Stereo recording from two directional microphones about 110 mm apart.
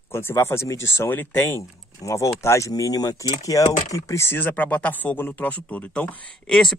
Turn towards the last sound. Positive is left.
turn(degrees=5)  # may be behind; listen again after turning